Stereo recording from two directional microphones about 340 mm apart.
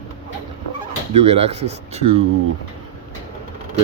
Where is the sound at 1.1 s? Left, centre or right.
Centre.